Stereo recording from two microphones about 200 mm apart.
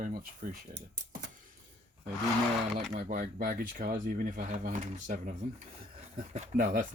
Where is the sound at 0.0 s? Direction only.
45° right (ahead or behind).